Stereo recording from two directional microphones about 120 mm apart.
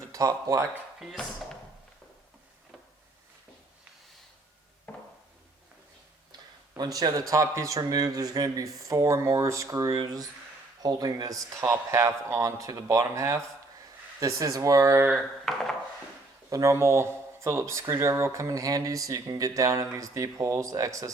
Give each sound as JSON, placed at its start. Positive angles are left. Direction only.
{"t": 0.1, "sound": "speech", "side_deg": -30}
{"t": 0.9, "sound": "speech", "side_deg": 5}
{"t": 4.9, "sound": "chop", "side_deg": 15}
{"t": 6.3, "sound": "speech", "side_deg": -35}
{"t": 15.4, "sound": "a sound", "side_deg": 5}
{"t": 16.5, "sound": "speech", "side_deg": -25}